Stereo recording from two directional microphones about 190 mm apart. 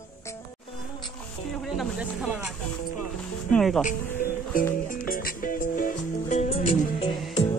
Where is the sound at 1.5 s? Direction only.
Centre (ahead or behind).